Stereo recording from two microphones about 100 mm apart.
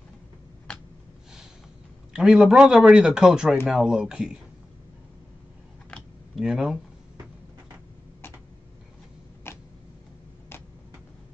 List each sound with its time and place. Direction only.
2.1 s a man's voice: centre (ahead or behind)
6.3 s speech: 5° right (ahead or behind)
9.5 s a sound: 25° left (ahead or behind)